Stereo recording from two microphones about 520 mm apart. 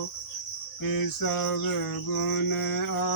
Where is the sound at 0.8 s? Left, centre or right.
Left.